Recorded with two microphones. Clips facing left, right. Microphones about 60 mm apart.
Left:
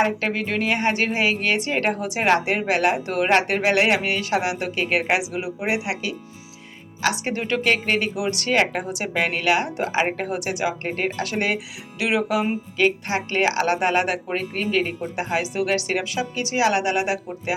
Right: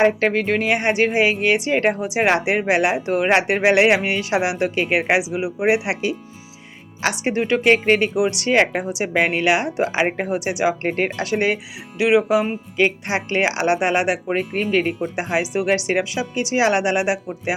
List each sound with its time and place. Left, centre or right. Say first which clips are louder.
0.0 s speech: right 5 dB; right
0.7 s speech: right 3 dB; centre
4.9 s speech: even; centre
5.6 s a woman's voice: right 7 dB; right; by 9.0 s centre
9.1 s speech: right 3 dB; right; by 10.6 s centre
10.8 s speech: right 4 dB; right
11.3 s speech: right 4 dB; centre; by 14.9 s right
15.1 s a woman's voice: right 2 dB; centre